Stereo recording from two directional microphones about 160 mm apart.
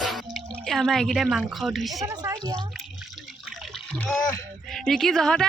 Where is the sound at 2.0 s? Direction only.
20° right (ahead or behind).